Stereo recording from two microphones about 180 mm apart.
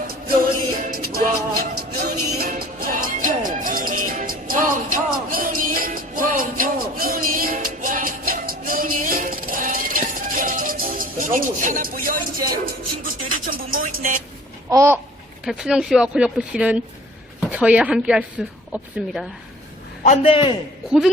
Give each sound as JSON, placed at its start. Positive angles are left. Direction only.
{"t": 0.8, "sound": "music", "side_deg": -55}
{"t": 13.8, "sound": "a sound", "side_deg": -50}
{"t": 14.7, "sound": "babbling", "side_deg": -15}
{"t": 15.4, "sound": "a woman's voice", "side_deg": 0}
{"t": 20.1, "sound": "a man's voice", "side_deg": 30}